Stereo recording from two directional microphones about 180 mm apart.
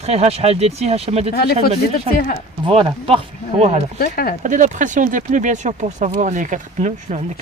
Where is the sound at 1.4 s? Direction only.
60° left (ahead or behind).